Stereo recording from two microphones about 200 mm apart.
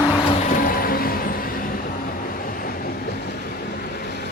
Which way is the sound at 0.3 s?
40° left (ahead or behind).